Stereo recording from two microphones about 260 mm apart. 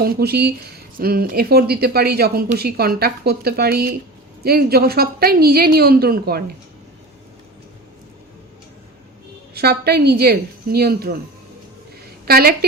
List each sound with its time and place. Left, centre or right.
0.0 s speech: right
9.6 s speech: right
12.2 s a woman's voice: right